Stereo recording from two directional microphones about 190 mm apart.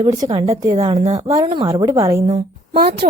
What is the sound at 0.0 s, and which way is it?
A woman's voice, 25° right (ahead or behind).